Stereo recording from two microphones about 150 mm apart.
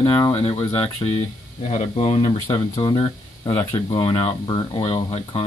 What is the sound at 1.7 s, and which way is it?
Speech, 45° left (ahead or behind).